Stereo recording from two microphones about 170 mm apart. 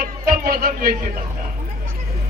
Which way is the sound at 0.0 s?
60° right (ahead or behind).